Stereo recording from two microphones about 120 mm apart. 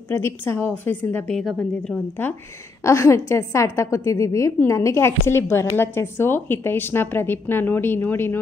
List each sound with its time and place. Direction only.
0.1 s a woman's voice: 20° left (ahead or behind)
1.3 s speech: centre (ahead or behind)
2.2 s a woman's voice: 20° left (ahead or behind)